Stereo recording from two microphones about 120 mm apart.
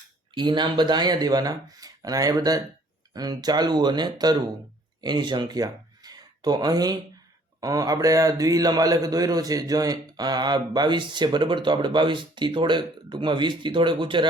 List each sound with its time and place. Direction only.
0.3 s a man's voice: 40° right (ahead or behind)